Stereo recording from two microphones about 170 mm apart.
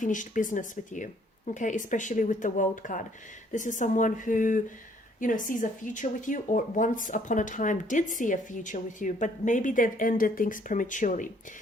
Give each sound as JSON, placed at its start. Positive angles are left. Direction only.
{"t": 0.0, "sound": "speech", "side_deg": 50}